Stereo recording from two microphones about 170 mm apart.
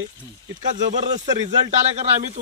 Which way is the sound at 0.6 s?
45° right (ahead or behind).